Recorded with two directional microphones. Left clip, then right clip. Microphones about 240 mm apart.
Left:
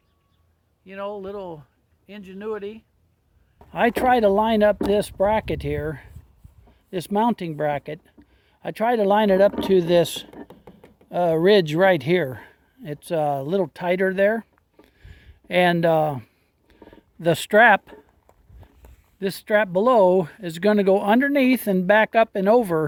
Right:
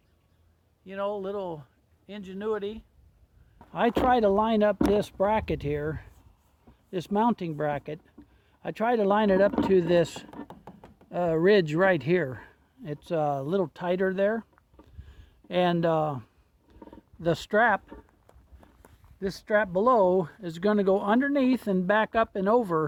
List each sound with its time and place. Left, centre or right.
0.9 s speech: centre
3.7 s speech: left
10.5 s a sound: centre
11.1 s speech: centre; by 17.8 s left
19.2 s speech: left